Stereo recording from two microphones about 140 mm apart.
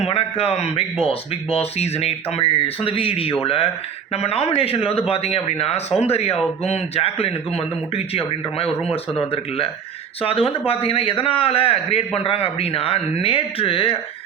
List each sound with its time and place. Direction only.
0.0 s a man's voice: 45° left (ahead or behind)